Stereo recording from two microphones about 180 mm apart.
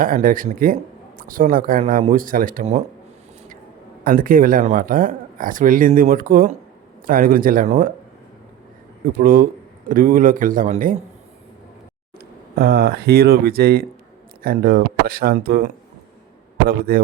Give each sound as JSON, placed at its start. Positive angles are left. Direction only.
{"t": 0.0, "sound": "speech", "side_deg": -50}
{"t": 4.0, "sound": "speech", "side_deg": -50}
{"t": 9.2, "sound": "speech", "side_deg": -50}
{"t": 12.5, "sound": "speech", "side_deg": -60}